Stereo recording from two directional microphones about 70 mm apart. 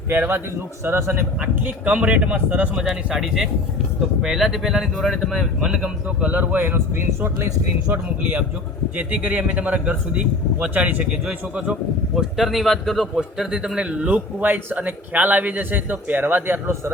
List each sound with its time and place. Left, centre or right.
0.1 s speech: right
1.4 s speech: right
2.7 s speech: centre; by 7.3 s right
9.0 s speech: right
12.1 s speech: centre
14.3 s speech: right